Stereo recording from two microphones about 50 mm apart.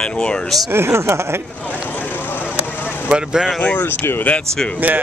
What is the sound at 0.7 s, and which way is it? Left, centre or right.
Speech, right.